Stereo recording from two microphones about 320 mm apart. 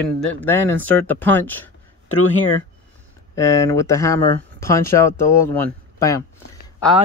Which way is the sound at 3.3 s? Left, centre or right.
Centre.